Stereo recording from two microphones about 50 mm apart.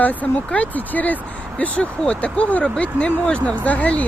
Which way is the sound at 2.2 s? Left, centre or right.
Left.